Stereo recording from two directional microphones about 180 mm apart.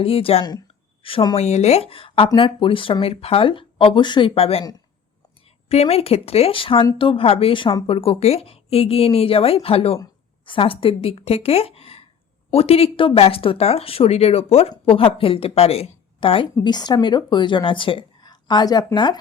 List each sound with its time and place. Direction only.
0.0 s a woman's voice: 30° left (ahead or behind)
1.4 s a woman's voice: 35° left (ahead or behind)
5.6 s a woman's voice: 35° left (ahead or behind)